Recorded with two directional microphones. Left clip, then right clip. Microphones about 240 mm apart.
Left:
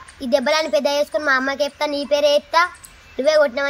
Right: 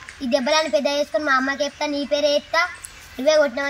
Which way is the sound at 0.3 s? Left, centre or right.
Centre.